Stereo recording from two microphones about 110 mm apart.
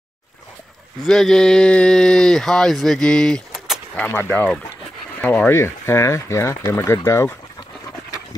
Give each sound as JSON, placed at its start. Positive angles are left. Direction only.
{"t": 1.0, "sound": "speech", "side_deg": 5}
{"t": 3.9, "sound": "speech", "side_deg": 15}
{"t": 5.5, "sound": "speech", "side_deg": 25}